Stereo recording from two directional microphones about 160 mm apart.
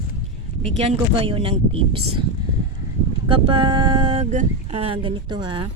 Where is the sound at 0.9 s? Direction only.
35° right (ahead or behind).